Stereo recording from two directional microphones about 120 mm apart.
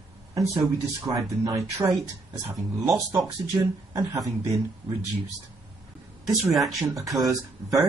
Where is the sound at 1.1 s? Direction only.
35° right (ahead or behind).